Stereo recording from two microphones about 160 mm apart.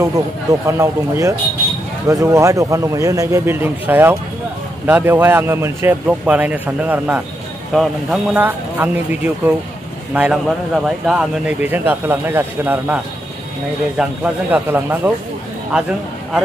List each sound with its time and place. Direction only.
0.0 s a man's voice: 15° right (ahead or behind)